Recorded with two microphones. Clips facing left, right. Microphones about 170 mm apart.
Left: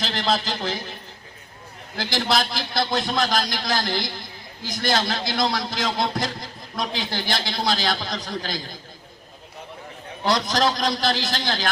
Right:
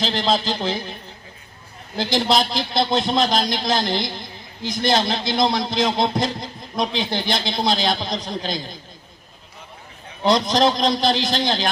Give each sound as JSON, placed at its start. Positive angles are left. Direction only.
{"t": 0.0, "sound": "a man's voice", "side_deg": -25}
{"t": 2.0, "sound": "a man's voice", "side_deg": -20}
{"t": 10.2, "sound": "a man's voice", "side_deg": -20}